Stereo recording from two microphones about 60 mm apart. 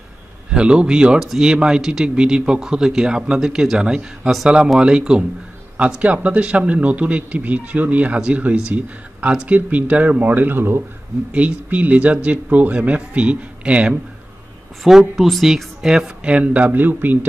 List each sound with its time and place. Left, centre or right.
0.5 s speech: centre; by 10.8 s right
11.3 s speech: right
14.8 s speech: centre
16.3 s speech: right